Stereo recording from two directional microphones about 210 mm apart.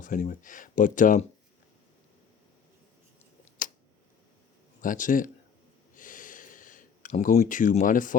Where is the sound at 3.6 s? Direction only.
40° left (ahead or behind).